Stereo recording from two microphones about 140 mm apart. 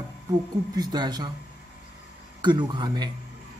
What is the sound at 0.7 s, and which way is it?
Speech, 30° right (ahead or behind).